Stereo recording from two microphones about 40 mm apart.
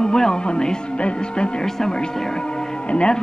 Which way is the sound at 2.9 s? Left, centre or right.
Left.